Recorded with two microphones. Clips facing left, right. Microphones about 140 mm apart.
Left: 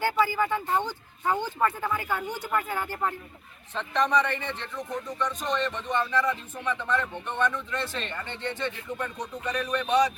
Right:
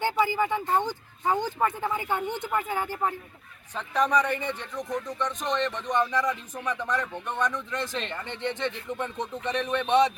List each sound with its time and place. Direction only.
0.0 s speech: 15° right (ahead or behind)